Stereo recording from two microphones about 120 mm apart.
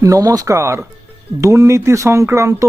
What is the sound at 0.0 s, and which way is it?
Speech, 30° right (ahead or behind).